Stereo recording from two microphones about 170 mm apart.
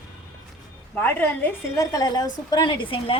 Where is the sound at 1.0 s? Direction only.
10° left (ahead or behind); by 3.2 s 30° left (ahead or behind).